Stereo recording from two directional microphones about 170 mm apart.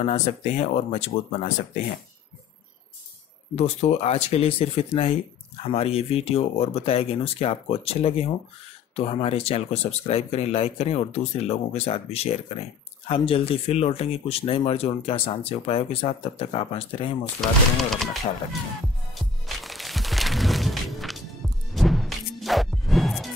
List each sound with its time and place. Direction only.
0.0 s speech: 40° left (ahead or behind)
3.5 s speech: 40° left (ahead or behind)
17.4 s speech: centre (ahead or behind)
19.1 s music: centre (ahead or behind)